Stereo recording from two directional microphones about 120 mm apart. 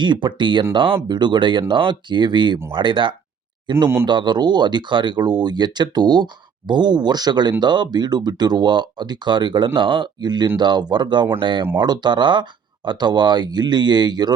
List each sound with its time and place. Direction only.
0.0 s speech: 40° right (ahead or behind)